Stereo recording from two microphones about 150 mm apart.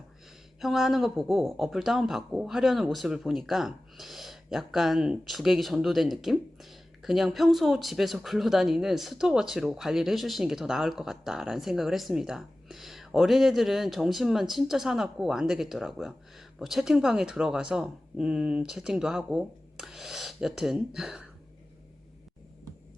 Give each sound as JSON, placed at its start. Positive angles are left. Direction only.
{"t": 0.6, "sound": "speech", "side_deg": 0}